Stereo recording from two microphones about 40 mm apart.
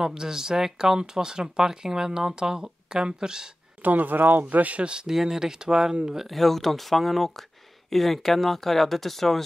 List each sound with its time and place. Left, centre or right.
0.0 s speech: centre
3.8 s speech: right
4.5 s speech: right
4.8 s speech: right
6.1 s speech: centre